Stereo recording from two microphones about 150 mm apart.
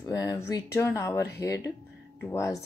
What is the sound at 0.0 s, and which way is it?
Speech, 25° left (ahead or behind).